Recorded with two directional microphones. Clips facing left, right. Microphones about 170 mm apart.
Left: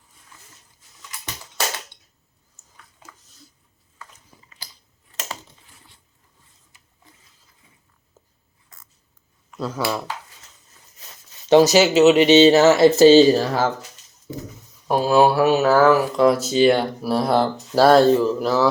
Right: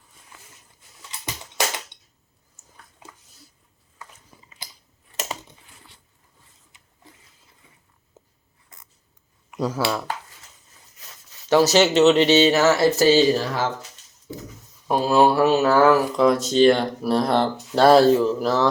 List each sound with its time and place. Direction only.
1.2 s a sound: 15° right (ahead or behind)
4.4 s chewing: 20° right (ahead or behind)
8.2 s a sound: 20° right (ahead or behind)
9.5 s speech: 10° right (ahead or behind)
11.4 s speech: 20° left (ahead or behind)
11.8 s speech: 5° left (ahead or behind)
12.4 s speech: 25° left (ahead or behind)
14.8 s speech: centre (ahead or behind)